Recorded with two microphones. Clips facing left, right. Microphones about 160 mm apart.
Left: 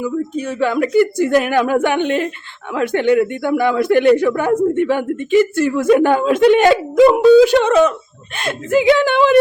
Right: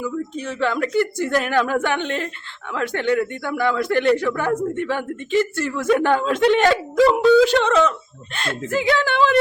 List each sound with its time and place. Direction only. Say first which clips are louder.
0.0 s speech: left 6 dB; 10° left (ahead or behind)